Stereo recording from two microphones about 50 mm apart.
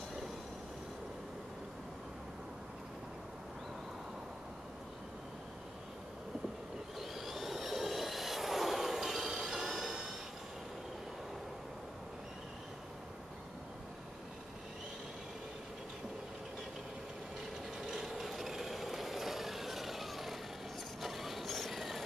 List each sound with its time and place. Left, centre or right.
7.0 s vehicle: centre
17.7 s vehicle: centre
21.0 s train: centre